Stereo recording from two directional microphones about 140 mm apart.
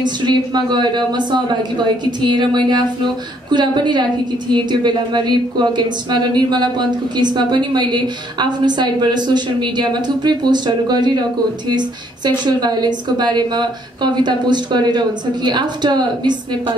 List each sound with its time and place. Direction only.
0.0 s a woman's voice: 30° right (ahead or behind)
12.4 s a woman's voice: 30° right (ahead or behind)